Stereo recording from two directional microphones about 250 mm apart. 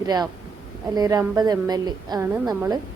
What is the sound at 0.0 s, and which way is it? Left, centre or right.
A woman's voice, centre.